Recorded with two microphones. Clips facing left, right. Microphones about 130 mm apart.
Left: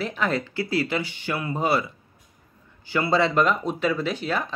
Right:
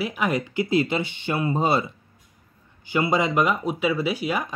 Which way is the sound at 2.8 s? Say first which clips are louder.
Even; 20° right (ahead or behind).